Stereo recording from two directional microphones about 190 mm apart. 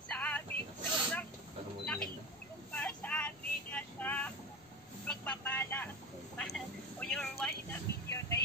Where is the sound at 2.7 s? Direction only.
5° left (ahead or behind).